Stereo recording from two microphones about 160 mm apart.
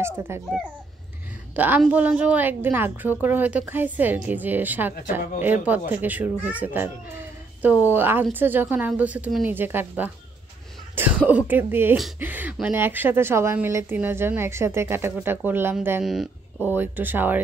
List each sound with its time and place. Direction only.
0.0 s speech: 15° right (ahead or behind)
1.5 s a woman's voice: 10° right (ahead or behind)